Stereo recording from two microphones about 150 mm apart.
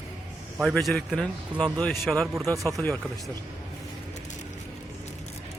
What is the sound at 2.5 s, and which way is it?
Speech, 25° right (ahead or behind).